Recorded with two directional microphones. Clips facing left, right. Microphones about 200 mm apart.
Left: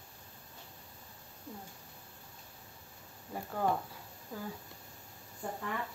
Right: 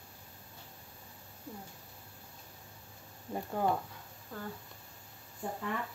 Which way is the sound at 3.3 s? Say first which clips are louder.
Right 4 dB; 20° right (ahead or behind).